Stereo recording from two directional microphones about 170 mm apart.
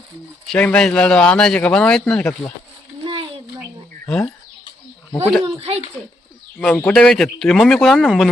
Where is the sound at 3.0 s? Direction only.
30° right (ahead or behind).